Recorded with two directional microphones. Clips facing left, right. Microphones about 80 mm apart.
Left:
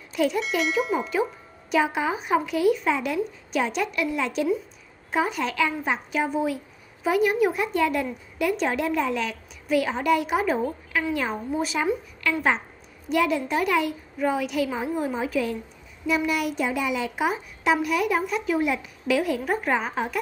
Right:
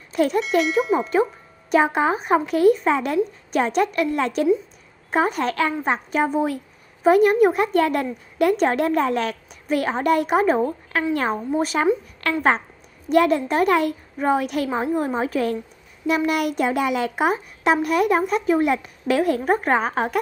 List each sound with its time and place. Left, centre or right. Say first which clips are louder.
0.1 s speech: right 4 dB; right
0.6 s tubular bells: right 6 dB; centre
1.7 s a woman's voice: right 5 dB; right
16.3 s a child's voice: right 4 dB; right